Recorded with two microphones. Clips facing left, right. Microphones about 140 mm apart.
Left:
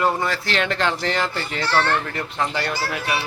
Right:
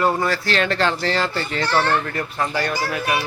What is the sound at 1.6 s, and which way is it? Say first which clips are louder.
Speech: right 1 dB; 15° right (ahead or behind).